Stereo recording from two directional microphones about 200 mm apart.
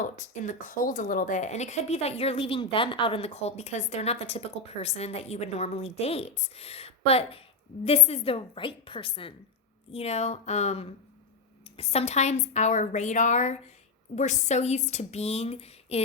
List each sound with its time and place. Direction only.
0.0 s a woman's voice: 40° left (ahead or behind)